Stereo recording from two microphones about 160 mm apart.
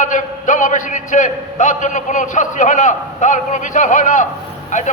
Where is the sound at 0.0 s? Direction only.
55° left (ahead or behind).